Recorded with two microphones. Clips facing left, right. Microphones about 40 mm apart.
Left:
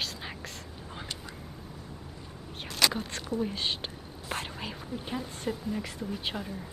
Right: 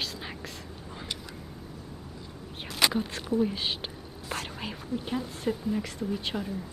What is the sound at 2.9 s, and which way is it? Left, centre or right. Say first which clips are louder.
Speech: right 5 dB; centre.